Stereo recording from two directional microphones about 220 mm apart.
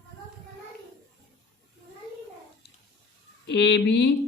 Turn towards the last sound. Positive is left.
turn(degrees=50)  # may be behind; listen again after turning